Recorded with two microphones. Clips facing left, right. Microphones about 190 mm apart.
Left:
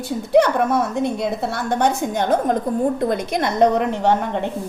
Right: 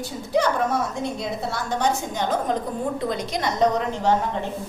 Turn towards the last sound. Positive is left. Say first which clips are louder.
# left 3 dB
turn(degrees=60)  # may be behind; listen again after turning